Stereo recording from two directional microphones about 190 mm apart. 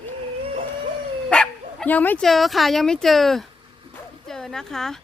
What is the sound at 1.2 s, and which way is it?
Speech, 5° left (ahead or behind).